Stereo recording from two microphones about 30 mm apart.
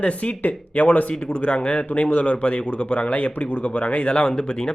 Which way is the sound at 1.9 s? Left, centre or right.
Left.